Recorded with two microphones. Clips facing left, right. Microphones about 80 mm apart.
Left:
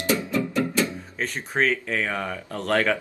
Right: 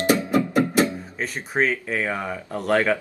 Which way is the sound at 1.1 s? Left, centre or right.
Centre.